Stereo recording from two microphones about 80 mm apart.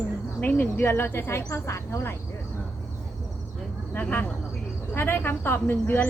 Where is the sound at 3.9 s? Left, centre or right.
Left.